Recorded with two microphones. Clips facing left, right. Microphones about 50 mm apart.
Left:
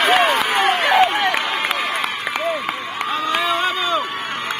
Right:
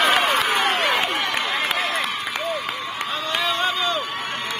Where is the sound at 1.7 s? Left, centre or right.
Left.